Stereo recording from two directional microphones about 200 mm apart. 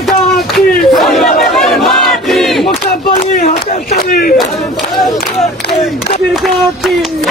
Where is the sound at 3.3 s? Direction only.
45° left (ahead or behind).